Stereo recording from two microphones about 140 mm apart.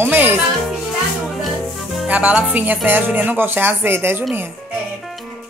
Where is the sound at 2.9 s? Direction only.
10° right (ahead or behind).